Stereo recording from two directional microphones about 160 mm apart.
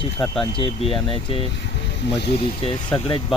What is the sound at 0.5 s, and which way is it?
Speech, 35° left (ahead or behind).